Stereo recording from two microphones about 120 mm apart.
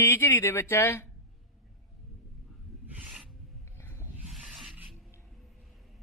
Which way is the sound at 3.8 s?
20° left (ahead or behind).